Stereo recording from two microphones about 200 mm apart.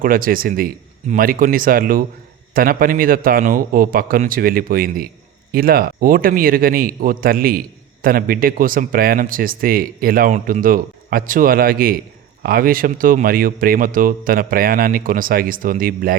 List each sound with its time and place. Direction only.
0.0 s speech: 45° right (ahead or behind)